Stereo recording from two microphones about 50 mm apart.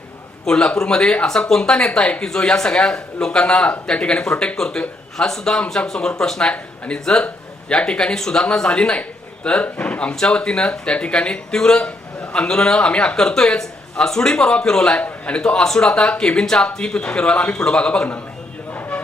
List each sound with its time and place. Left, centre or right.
0.4 s speech: centre
2.2 s speech: centre
14.9 s a man's voice: left
15.5 s speech: centre
18.7 s a sound: left